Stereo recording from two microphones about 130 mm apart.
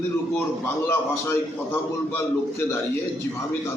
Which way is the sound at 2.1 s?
20° left (ahead or behind).